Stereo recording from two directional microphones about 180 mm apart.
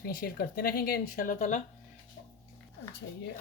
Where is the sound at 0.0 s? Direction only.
55° left (ahead or behind).